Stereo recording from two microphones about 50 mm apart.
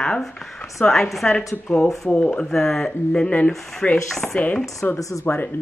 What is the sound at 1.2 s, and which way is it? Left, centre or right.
Speech, centre.